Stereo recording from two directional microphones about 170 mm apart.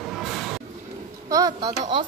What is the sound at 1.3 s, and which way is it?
Speech, 20° right (ahead or behind).